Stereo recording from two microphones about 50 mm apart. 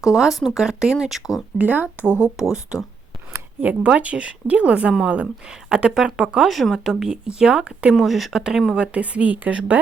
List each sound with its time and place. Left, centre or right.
0.0 s speech: centre
1.5 s speech: right
2.0 s speech: left
2.3 s speech: centre
3.6 s a woman's voice: right
7.9 s speech: centre
8.7 s a woman's voice: right